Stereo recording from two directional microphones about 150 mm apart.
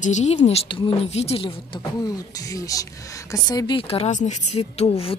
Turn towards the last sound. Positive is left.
turn(degrees=40)  # may be behind; listen again after turning